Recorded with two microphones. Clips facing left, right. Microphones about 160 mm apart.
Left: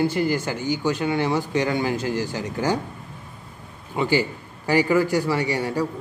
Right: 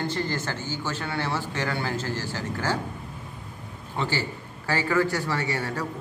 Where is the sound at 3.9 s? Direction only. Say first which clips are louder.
Left 7 dB; 15° left (ahead or behind).